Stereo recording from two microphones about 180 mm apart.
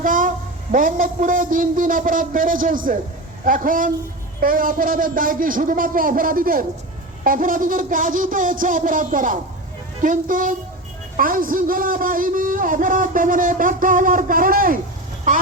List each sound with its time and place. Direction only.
0.0 s a man's voice: 50° right (ahead or behind)